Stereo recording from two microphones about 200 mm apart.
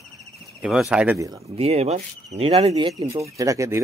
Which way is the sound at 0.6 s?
5° right (ahead or behind).